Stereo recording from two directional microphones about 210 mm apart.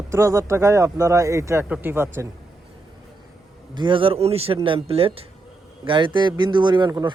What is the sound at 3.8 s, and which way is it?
A man's voice, 25° right (ahead or behind).